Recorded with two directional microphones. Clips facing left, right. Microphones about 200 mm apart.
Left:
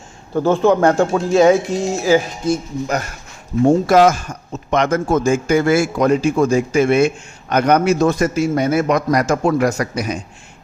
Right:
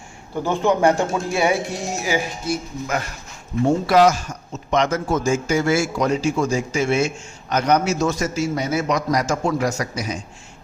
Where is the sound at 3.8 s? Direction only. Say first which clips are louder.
Left 3 dB; 50° left (ahead or behind).